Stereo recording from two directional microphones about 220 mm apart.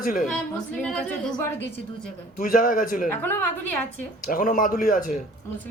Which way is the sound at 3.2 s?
10° left (ahead or behind).